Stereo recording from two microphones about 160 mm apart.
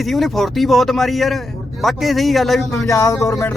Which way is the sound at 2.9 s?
20° left (ahead or behind).